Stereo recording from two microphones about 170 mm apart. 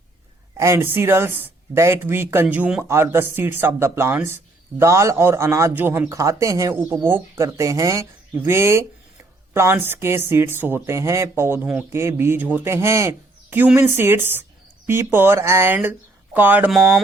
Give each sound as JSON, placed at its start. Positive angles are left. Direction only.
{"t": 0.5, "sound": "speech", "side_deg": -15}